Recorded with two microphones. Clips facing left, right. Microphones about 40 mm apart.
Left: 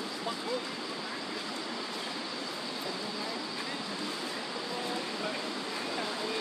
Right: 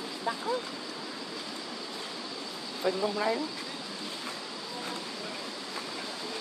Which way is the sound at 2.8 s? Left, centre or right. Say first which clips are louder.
Right 13 dB; right.